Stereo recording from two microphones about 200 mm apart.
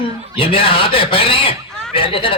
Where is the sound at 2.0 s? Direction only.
25° left (ahead or behind).